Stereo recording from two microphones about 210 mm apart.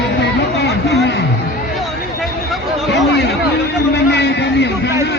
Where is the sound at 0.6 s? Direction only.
50° left (ahead or behind).